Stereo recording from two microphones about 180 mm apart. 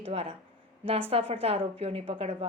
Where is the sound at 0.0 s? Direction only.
30° right (ahead or behind).